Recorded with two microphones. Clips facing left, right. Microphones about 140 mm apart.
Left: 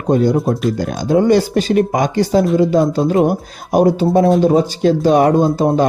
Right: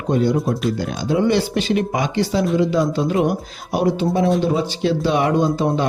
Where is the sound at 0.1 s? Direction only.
40° left (ahead or behind).